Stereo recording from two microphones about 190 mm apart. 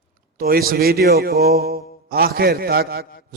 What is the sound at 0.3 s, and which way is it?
A man's voice, 50° right (ahead or behind).